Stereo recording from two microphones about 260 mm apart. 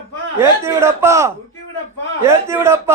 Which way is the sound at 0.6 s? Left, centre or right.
Centre.